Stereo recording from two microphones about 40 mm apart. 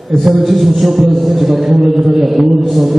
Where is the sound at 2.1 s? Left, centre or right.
Centre.